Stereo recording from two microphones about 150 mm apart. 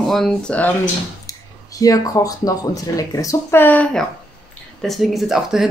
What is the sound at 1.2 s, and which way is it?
Speech, 25° left (ahead or behind).